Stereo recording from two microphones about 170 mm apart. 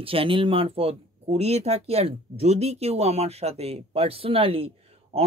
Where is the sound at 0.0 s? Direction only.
35° right (ahead or behind).